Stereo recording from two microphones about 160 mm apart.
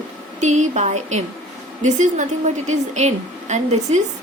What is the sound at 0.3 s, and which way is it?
A woman's voice, 45° right (ahead or behind).